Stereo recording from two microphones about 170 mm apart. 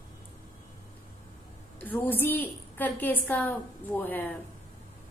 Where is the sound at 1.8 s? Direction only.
10° left (ahead or behind).